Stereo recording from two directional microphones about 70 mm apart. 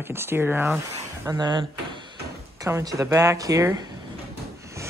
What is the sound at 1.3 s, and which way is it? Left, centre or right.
Speech, right.